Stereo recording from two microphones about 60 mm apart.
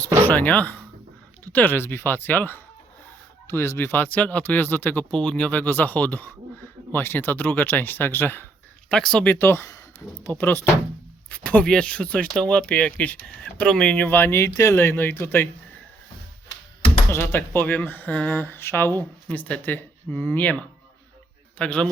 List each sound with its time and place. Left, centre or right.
0.3 s speech: left
3.4 s speech: left
5.1 s speech: centre
5.5 s speech: left
8.9 s speech: centre
9.2 s speech: left
11.3 s speech: left
11.6 s speech: centre
14.1 s speech: left
17.1 s speech: left
18.4 s speech: left
19.3 s speech: left
21.6 s speech: centre